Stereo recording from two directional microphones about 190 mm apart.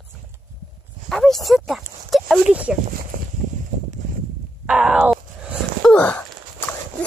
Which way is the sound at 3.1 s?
50° right (ahead or behind).